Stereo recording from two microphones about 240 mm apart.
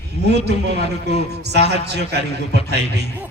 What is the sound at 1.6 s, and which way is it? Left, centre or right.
Speech, right.